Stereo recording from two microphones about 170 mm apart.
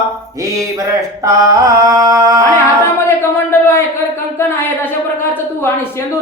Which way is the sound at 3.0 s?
15° left (ahead or behind).